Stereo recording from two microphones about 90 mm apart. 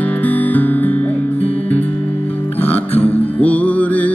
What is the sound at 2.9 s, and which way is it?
Music, 20° left (ahead or behind).